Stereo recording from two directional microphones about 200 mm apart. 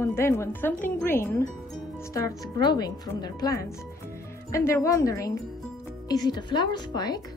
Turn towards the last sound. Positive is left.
turn(degrees=20)  # may be behind; listen again after turning